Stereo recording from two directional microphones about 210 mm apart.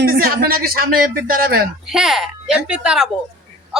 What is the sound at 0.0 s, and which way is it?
A man's voice, 45° right (ahead or behind).